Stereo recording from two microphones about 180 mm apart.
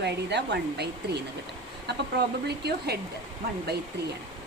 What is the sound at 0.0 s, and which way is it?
Speech, 70° right (ahead or behind).